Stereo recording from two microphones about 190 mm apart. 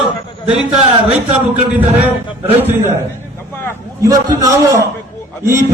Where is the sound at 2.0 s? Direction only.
10° right (ahead or behind).